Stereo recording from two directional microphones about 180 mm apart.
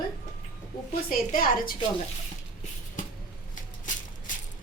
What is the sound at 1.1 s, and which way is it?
Speech, 55° left (ahead or behind).